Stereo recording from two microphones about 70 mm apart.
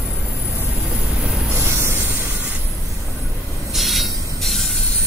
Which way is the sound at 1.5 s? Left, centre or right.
Right.